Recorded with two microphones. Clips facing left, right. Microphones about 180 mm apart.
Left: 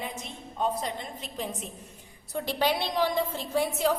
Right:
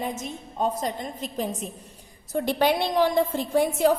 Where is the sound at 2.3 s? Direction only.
50° right (ahead or behind).